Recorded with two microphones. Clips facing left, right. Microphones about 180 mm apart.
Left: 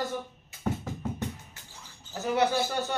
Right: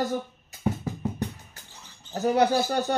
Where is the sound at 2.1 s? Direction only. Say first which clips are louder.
Right 4 dB; 35° right (ahead or behind).